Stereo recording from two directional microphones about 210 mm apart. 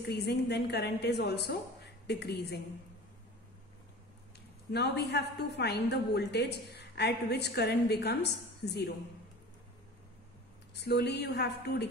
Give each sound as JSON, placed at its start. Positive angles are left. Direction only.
{"t": 0.1, "sound": "a woman's voice", "side_deg": 50}
{"t": 4.7, "sound": "a woman's voice", "side_deg": 50}
{"t": 10.7, "sound": "a woman's voice", "side_deg": 50}